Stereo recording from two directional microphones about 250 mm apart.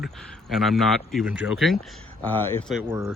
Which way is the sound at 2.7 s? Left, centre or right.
Centre.